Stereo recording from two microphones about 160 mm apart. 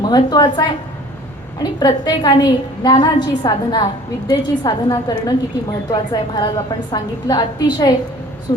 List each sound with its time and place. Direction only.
0.0 s a woman's voice: 25° left (ahead or behind)